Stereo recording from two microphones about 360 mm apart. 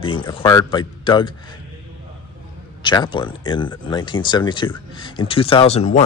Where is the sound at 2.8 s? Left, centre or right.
Centre.